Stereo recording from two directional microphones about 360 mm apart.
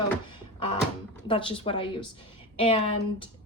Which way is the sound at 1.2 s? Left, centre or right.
Centre.